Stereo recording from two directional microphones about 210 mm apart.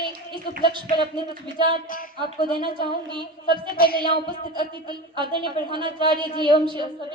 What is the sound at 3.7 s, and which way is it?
Child singing, 45° left (ahead or behind).